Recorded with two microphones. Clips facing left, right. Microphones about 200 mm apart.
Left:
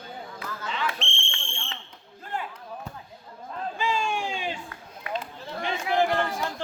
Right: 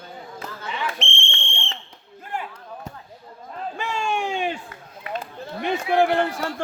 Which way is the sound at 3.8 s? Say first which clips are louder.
Right 2 dB; 65° right (ahead or behind).